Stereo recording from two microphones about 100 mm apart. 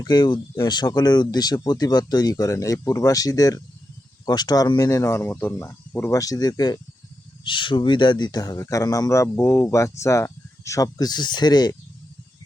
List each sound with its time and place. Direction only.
0.0 s speech: 45° left (ahead or behind)
5.2 s speech: 20° left (ahead or behind); by 6.7 s 40° left (ahead or behind)
7.4 s speech: 55° left (ahead or behind)